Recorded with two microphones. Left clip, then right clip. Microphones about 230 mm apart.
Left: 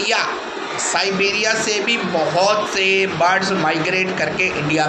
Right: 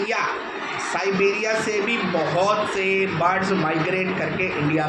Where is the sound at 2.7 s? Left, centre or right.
Left.